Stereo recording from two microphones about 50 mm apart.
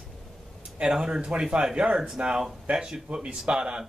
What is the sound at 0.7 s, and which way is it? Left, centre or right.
Speech, centre.